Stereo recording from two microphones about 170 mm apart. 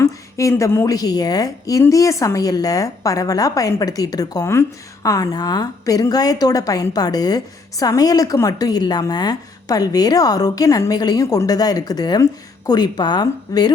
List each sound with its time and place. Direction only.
0.0 s a woman's voice: 20° left (ahead or behind)